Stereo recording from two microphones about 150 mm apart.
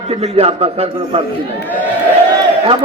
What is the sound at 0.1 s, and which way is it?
Speech, 40° right (ahead or behind).